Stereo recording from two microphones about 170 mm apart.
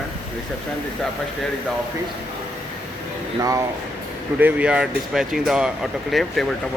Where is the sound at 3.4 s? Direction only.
20° right (ahead or behind).